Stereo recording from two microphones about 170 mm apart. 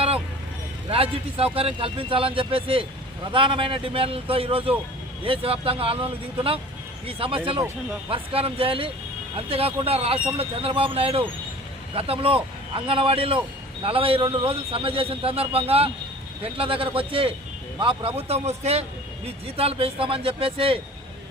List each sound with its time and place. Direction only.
0.9 s speech: 35° right (ahead or behind)